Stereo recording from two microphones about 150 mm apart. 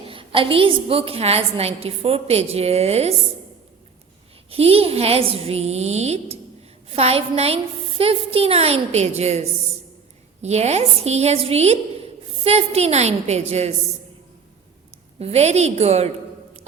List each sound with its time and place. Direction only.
0.0 s a woman's voice: 35° right (ahead or behind)
4.4 s a woman's voice: 40° right (ahead or behind)
15.2 s a woman's voice: 45° right (ahead or behind)